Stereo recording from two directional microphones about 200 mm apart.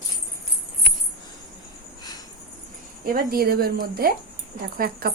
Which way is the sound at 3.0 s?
45° right (ahead or behind).